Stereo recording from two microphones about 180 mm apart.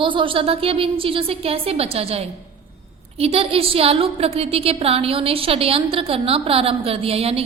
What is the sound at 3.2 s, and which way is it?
A woman's voice, 30° right (ahead or behind).